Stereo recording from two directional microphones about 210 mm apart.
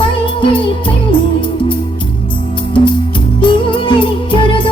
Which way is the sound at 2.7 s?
25° left (ahead or behind).